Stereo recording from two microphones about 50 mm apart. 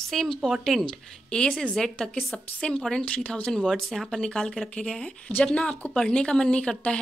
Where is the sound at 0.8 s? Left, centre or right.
Centre.